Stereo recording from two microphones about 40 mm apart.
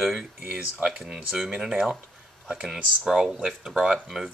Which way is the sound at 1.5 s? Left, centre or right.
Right.